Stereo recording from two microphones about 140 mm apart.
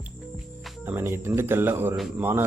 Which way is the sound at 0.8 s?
20° right (ahead or behind).